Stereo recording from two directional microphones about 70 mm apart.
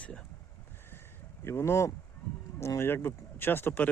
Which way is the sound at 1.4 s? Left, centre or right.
Left.